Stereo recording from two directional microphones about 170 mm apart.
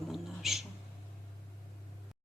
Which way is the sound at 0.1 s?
Centre (ahead or behind).